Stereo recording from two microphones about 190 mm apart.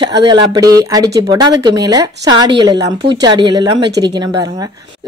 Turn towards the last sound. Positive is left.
turn(degrees=-20)  # may be behind; listen again after turning